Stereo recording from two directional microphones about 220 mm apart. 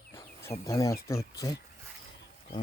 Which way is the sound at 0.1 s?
10° left (ahead or behind).